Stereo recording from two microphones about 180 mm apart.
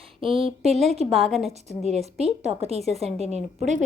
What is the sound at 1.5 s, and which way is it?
A woman's voice, 35° right (ahead or behind).